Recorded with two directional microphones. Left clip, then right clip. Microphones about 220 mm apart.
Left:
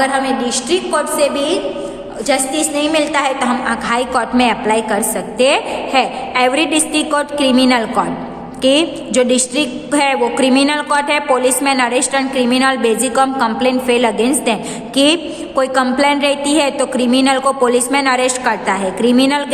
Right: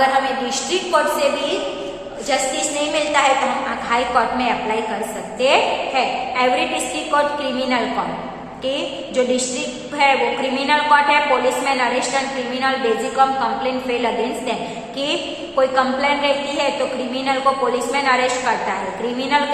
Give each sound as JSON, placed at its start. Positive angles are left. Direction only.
{"t": 0.0, "sound": "a woman's voice", "side_deg": 45}
{"t": 2.2, "sound": "a woman's voice", "side_deg": 50}